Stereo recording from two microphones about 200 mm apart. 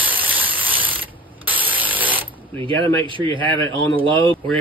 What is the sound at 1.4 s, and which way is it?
Spray, 10° right (ahead or behind).